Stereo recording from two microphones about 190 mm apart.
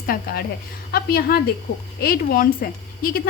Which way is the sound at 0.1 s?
50° left (ahead or behind).